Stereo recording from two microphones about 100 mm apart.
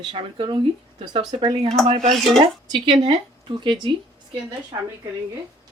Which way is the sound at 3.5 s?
50° right (ahead or behind).